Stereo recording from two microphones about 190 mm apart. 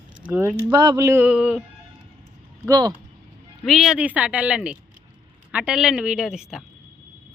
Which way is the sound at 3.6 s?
Centre (ahead or behind).